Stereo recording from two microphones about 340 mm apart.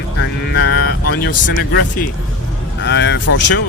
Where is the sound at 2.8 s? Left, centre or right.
Left.